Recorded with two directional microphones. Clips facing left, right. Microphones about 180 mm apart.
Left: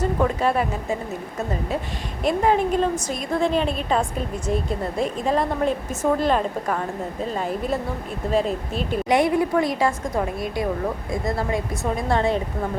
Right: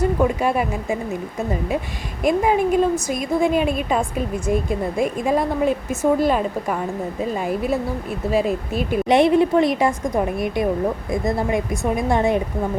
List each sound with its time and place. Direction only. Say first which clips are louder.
0.0 s a woman's voice: right 2 dB; 10° right (ahead or behind)
2.2 s a woman's voice: right 2 dB; 10° right (ahead or behind)
9.0 s a woman's voice: right 5 dB; 25° right (ahead or behind)